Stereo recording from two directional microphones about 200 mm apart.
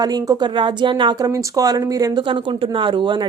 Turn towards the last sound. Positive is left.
turn(degrees=-25)  # may be behind; listen again after turning